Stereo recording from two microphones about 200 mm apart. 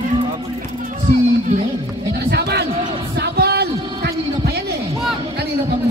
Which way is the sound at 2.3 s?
55° right (ahead or behind).